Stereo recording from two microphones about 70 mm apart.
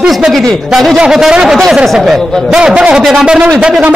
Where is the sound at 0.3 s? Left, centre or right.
Centre.